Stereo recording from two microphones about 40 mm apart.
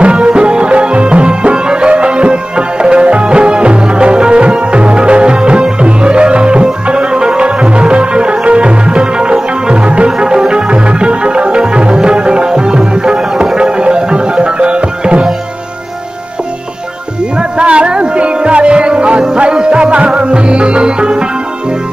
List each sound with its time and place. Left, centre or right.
0.0 s music: right
17.4 s music: right